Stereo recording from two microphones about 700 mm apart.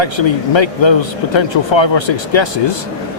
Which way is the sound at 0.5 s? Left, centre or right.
Left.